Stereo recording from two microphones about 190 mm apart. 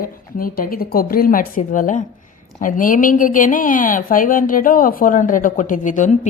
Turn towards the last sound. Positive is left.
turn(degrees=40)  # may be behind; listen again after turning